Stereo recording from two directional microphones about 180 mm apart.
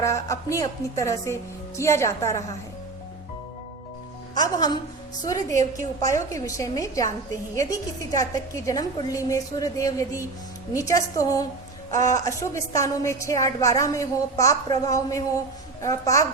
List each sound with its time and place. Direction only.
0.0 s a woman's voice: 15° left (ahead or behind)
4.5 s a woman's voice: 20° left (ahead or behind)